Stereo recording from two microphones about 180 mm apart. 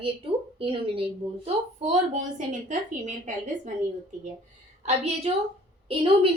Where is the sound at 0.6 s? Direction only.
30° right (ahead or behind).